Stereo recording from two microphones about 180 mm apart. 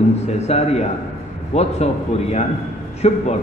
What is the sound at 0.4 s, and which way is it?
A man's voice, 35° left (ahead or behind).